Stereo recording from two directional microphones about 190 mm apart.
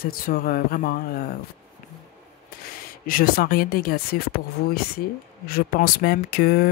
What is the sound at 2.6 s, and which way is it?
Speech, 50° left (ahead or behind).